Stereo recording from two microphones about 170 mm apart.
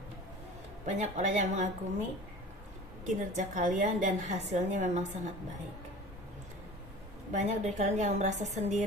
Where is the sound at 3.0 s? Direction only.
45° right (ahead or behind).